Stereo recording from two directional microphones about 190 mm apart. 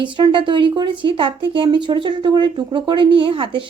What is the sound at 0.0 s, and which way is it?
Speech, 25° right (ahead or behind).